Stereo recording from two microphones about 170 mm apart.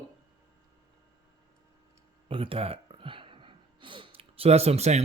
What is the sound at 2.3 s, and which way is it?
Speech, 30° right (ahead or behind).